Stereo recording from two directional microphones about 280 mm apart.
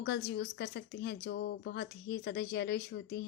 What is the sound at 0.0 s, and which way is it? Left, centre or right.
A woman's voice, left.